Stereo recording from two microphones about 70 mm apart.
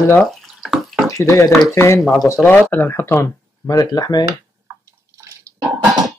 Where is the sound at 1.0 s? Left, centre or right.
Left.